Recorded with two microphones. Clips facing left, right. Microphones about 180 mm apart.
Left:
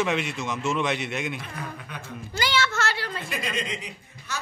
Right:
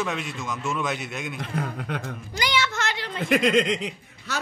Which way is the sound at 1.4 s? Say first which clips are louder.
Right 7 dB; 85° right.